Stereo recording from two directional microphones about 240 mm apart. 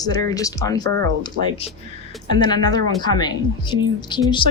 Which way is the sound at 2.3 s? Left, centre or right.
Centre.